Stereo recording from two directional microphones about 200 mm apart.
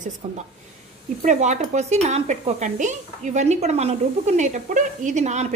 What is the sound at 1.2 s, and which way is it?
Speech, 35° right (ahead or behind).